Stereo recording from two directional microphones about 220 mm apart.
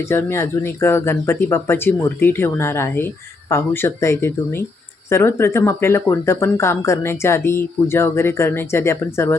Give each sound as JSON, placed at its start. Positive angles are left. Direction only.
{"t": 0.1, "sound": "speech", "side_deg": 10}